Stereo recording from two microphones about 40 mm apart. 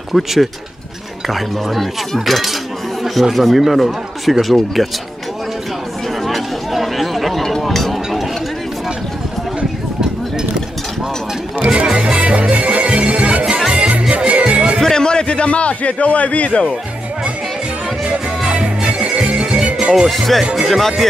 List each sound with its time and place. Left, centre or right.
0.1 s speech: centre
6.2 s chatter: centre
7.6 s a sound: centre
11.6 s music: right
14.8 s a sound: centre; by 16.7 s left
18.5 s music: right
20.1 s speech: centre